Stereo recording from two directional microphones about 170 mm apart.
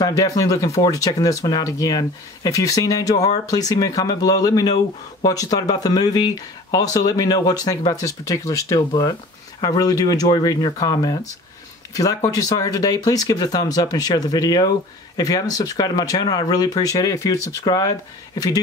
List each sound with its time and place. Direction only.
0.4 s speech: 20° left (ahead or behind)